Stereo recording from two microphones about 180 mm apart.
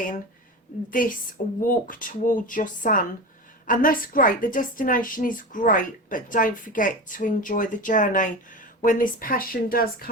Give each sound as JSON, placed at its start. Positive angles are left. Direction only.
{"t": 0.9, "sound": "a woman's voice", "side_deg": 50}